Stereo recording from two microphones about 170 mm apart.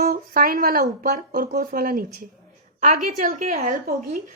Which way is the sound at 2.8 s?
45° right (ahead or behind).